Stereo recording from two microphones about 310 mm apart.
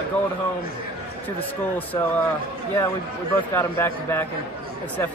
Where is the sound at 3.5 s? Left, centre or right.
Centre.